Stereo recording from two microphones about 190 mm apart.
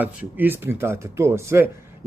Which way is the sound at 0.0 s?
10° right (ahead or behind).